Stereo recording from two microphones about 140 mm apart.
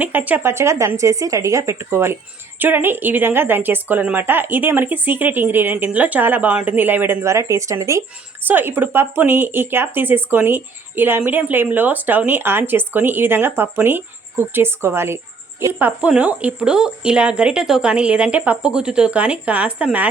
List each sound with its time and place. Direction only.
0.0 s speech: 10° right (ahead or behind)